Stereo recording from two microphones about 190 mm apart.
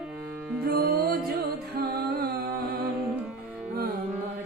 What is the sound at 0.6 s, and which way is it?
Music, 50° right (ahead or behind).